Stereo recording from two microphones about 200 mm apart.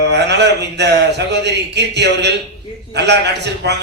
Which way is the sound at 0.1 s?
60° right (ahead or behind).